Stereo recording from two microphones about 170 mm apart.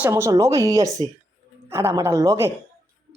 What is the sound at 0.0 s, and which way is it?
Speech, 15° right (ahead or behind).